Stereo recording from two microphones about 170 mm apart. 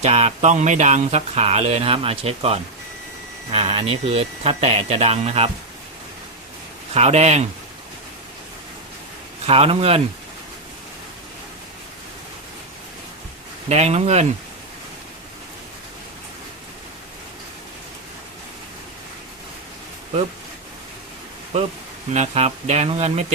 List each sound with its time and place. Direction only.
0.0 s speech: 40° right (ahead or behind)
6.9 s speech: 40° right (ahead or behind)
9.5 s speech: 35° right (ahead or behind)
13.7 s speech: 40° right (ahead or behind)
22.1 s speech: 40° right (ahead or behind)